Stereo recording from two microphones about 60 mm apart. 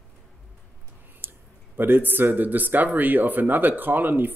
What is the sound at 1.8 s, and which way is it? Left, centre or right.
Speech, right.